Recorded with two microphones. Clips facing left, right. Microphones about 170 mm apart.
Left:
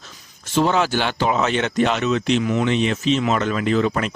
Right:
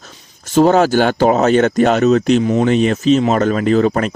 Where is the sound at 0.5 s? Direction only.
45° right (ahead or behind).